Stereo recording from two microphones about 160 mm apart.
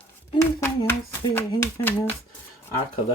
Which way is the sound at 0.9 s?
15° left (ahead or behind).